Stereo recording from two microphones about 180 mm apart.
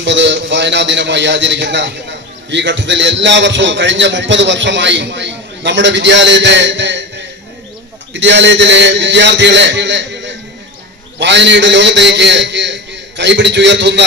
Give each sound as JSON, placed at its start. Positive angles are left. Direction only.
{"t": 0.0, "sound": "a man's voice", "side_deg": -80}
{"t": 8.1, "sound": "a man's voice", "side_deg": -85}